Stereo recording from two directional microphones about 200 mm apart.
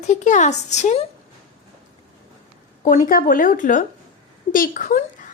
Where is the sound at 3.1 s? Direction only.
45° left (ahead or behind).